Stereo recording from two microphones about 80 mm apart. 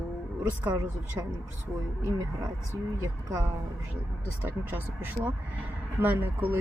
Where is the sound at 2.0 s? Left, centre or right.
Right.